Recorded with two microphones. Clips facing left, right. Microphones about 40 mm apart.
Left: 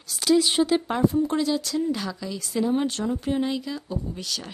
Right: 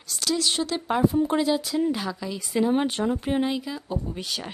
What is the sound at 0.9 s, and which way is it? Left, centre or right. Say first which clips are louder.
Speech: right 1 dB; centre.